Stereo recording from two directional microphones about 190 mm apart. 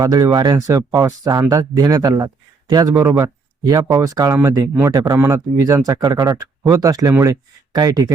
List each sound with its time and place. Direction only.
0.0 s speech: 20° right (ahead or behind)